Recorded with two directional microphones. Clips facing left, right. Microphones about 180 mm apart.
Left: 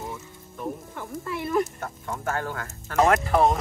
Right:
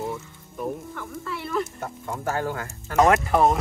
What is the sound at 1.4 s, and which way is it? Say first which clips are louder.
Speech: left 3 dB; 15° left (ahead or behind).